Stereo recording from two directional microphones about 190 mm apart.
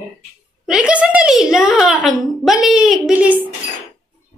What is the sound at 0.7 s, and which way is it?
A woman's voice, 5° right (ahead or behind).